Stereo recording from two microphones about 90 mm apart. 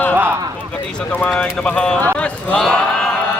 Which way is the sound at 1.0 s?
15° left (ahead or behind).